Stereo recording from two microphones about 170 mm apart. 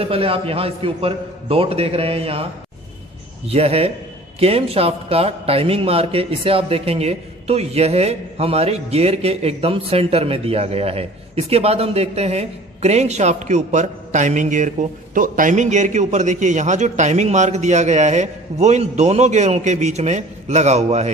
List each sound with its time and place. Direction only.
0.0 s a man's voice: 35° right (ahead or behind)
3.4 s a man's voice: 35° right (ahead or behind)